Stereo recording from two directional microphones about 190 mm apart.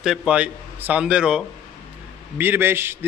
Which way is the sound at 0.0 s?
5° right (ahead or behind).